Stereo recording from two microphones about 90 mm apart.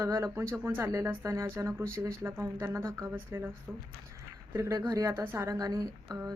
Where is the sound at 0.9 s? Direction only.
35° right (ahead or behind).